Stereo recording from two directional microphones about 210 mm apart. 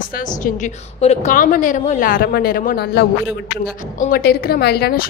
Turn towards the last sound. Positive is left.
turn(degrees=50)  # may be behind; listen again after turning